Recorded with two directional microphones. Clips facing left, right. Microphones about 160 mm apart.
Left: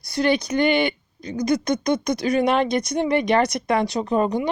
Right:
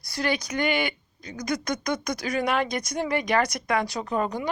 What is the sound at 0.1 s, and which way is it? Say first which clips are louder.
Speech: left 7 dB; 25° left (ahead or behind).